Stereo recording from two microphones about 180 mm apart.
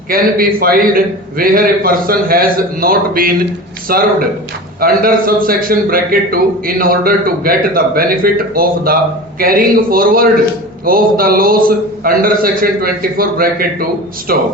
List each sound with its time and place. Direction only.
0.1 s a man's voice: 55° right (ahead or behind)